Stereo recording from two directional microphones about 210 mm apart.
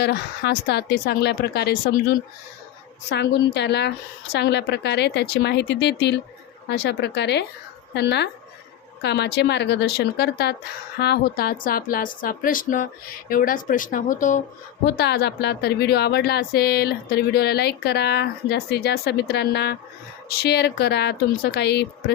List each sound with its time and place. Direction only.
0.0 s speech: 50° left (ahead or behind)
14.9 s speech: 50° left (ahead or behind)